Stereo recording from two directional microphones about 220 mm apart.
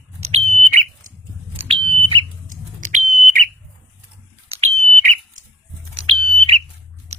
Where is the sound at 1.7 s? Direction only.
25° right (ahead or behind).